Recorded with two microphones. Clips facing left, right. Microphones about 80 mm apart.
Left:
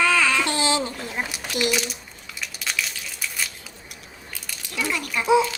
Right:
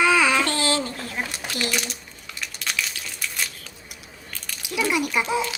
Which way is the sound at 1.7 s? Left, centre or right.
Centre.